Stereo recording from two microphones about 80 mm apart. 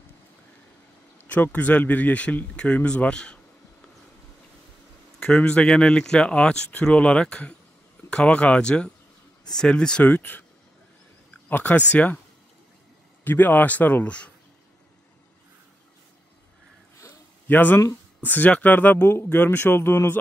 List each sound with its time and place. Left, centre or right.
1.2 s speech: centre
5.2 s speech: centre
10.0 s speech: left
11.4 s speech: left
13.2 s speech: left
17.5 s speech: left